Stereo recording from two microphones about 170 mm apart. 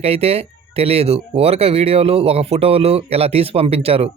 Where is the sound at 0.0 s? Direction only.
35° right (ahead or behind).